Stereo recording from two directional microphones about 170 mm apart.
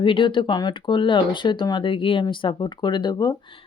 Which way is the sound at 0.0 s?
30° left (ahead or behind).